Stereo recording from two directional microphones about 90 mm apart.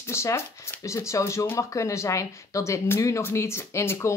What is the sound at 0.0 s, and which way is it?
Speech, 30° left (ahead or behind).